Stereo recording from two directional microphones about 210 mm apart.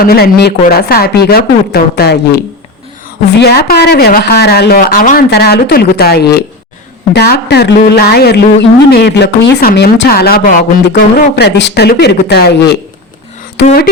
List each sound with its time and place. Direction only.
0.0 s speech: 45° left (ahead or behind)
3.4 s speech: 50° left (ahead or behind)